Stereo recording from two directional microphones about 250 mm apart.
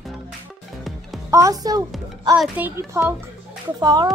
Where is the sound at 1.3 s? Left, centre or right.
Centre.